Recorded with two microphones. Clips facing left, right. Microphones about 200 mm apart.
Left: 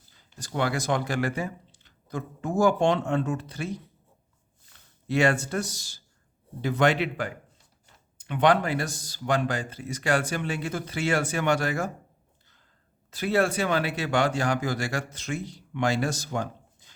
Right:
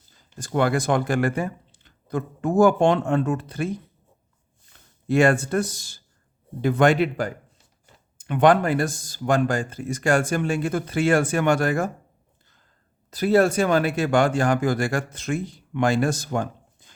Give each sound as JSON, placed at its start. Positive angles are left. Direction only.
{"t": 0.2, "sound": "speech", "side_deg": -50}
{"t": 5.0, "sound": "speech", "side_deg": -50}
{"t": 13.1, "sound": "speech", "side_deg": -40}